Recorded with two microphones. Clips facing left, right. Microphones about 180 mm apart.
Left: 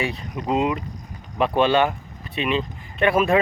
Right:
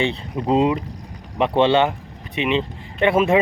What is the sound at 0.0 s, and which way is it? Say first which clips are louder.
Speech: right 4 dB; 30° right (ahead or behind).